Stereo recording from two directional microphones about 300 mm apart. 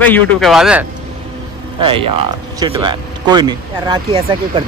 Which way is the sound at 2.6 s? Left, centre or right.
Centre.